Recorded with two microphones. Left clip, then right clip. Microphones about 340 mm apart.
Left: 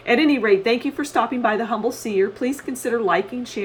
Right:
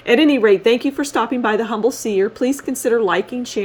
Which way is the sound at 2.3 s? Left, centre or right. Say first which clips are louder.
Right 5 dB; right.